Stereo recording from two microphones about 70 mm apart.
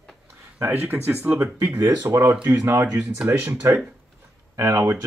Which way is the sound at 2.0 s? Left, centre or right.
Right.